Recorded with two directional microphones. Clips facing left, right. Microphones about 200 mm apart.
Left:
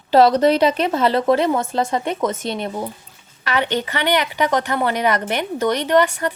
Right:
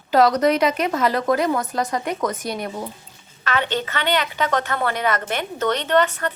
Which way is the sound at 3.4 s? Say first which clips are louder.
Left 2 dB; 15° left (ahead or behind).